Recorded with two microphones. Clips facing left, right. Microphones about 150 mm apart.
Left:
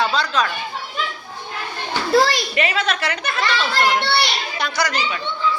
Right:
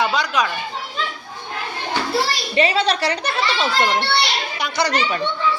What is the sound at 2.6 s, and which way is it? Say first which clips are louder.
A woman's voice: right 6 dB; 30° right (ahead or behind).